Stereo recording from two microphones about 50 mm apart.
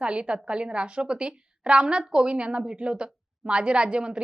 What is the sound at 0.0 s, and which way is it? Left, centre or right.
A woman's voice, right.